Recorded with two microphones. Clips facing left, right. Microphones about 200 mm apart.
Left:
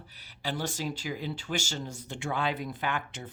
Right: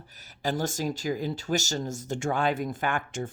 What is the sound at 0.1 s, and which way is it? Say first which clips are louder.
Speech: right 6 dB; 45° right (ahead or behind).